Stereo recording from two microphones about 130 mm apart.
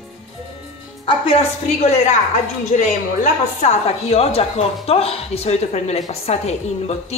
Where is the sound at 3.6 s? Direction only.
50° left (ahead or behind).